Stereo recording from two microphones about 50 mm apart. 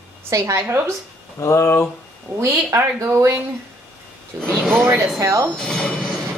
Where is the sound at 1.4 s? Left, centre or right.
Left.